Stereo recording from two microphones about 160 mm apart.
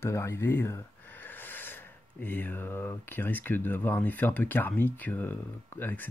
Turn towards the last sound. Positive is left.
turn(degrees=10)  # may be behind; listen again after turning